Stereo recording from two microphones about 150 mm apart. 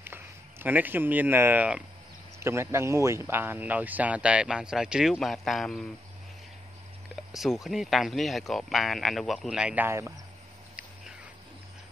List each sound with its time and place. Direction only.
0.0 s speech: 15° right (ahead or behind); by 5.9 s centre (ahead or behind)
7.3 s speech: centre (ahead or behind)
9.8 s speech: 15° right (ahead or behind)